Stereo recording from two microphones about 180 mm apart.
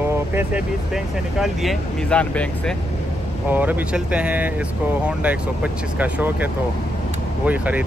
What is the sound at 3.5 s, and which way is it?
Speech, 10° right (ahead or behind).